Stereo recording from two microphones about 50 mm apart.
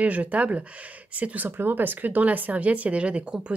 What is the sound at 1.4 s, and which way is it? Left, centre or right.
Speech, right.